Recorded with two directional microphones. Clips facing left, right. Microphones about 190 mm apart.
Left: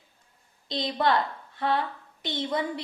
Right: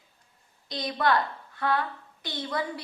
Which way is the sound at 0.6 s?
25° left (ahead or behind).